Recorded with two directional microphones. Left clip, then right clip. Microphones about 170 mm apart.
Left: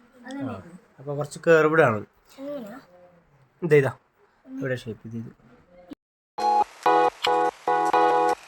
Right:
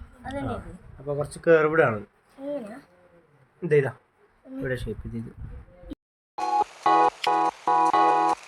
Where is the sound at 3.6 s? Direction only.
25° left (ahead or behind).